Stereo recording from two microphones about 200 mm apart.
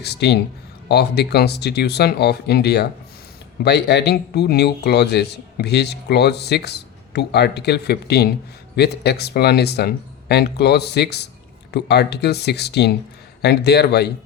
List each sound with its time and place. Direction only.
0.0 s a man's voice: 55° left (ahead or behind)